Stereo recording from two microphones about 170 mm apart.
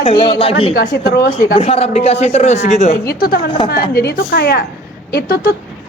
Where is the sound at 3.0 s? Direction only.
60° left (ahead or behind).